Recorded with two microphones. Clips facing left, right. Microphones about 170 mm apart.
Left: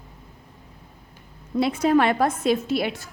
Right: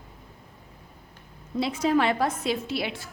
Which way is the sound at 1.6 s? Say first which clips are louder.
Left 4 dB; 55° left (ahead or behind).